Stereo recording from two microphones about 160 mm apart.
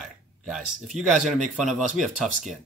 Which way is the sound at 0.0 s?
Centre (ahead or behind).